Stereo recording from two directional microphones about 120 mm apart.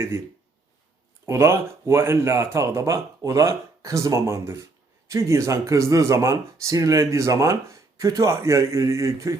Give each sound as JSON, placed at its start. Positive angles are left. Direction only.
{"t": 1.3, "sound": "speech", "side_deg": -20}